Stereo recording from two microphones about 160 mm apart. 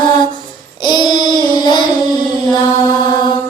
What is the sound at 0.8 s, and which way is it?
Child singing, 30° left (ahead or behind).